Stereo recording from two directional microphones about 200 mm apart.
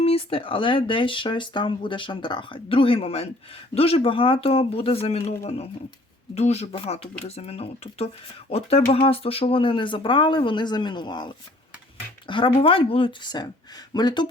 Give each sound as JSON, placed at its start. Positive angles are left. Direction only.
{"t": 0.0, "sound": "speech", "side_deg": 30}